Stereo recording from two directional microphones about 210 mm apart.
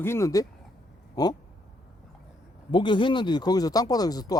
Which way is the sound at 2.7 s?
20° left (ahead or behind).